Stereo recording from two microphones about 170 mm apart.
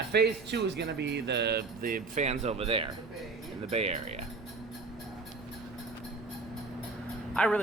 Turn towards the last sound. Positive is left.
turn(degrees=5)  # may be behind; listen again after turning